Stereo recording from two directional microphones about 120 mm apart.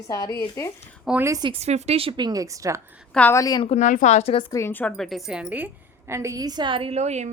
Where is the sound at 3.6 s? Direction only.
75° left (ahead or behind); by 4.5 s 55° left (ahead or behind).